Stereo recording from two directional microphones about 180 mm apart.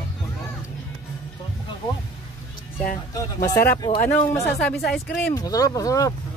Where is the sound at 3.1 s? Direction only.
20° left (ahead or behind).